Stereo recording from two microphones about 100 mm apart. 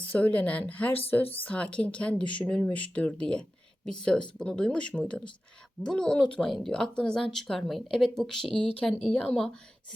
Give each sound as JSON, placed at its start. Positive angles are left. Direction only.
{"t": 0.0, "sound": "speech", "side_deg": 15}